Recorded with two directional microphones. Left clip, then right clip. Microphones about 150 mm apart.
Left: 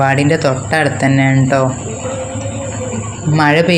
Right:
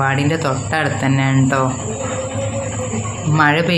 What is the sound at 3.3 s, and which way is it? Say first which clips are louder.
Speech: left 3 dB; 25° left (ahead or behind).